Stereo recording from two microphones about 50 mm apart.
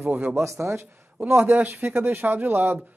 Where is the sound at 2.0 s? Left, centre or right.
Right.